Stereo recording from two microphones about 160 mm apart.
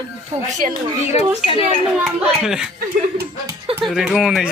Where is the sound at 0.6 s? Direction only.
50° right (ahead or behind).